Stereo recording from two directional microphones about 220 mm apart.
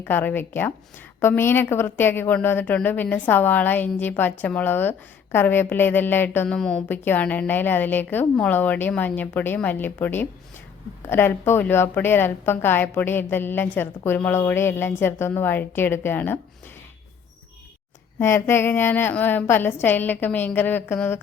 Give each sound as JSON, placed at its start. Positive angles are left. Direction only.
{"t": 0.0, "sound": "a woman's voice", "side_deg": 10}
{"t": 18.2, "sound": "a woman's voice", "side_deg": 10}